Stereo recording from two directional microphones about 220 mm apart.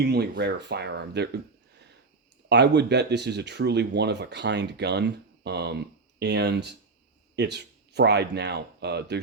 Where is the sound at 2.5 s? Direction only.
50° right (ahead or behind).